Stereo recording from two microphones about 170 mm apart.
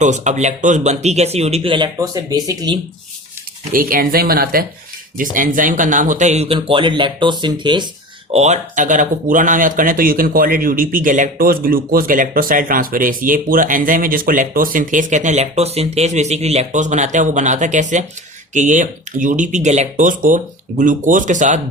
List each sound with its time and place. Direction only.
0.0 s speech: 45° right (ahead or behind); by 2.7 s 20° right (ahead or behind)
3.7 s speech: 55° right (ahead or behind); by 7.9 s 25° right (ahead or behind)
8.3 s speech: 40° right (ahead or behind)